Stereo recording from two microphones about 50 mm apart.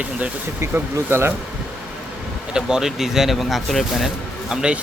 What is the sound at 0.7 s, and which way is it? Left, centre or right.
Speech, right.